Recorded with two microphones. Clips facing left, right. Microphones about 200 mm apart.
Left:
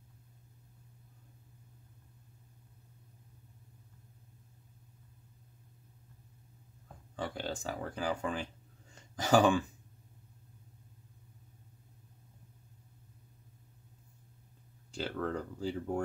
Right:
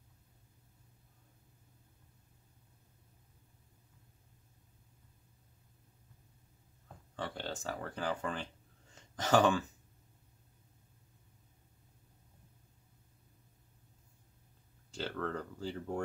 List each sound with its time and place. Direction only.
7.2 s speech: 10° left (ahead or behind)
15.0 s speech: 10° left (ahead or behind)